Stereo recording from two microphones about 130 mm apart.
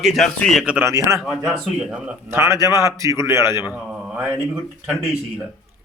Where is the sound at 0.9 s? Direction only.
25° right (ahead or behind).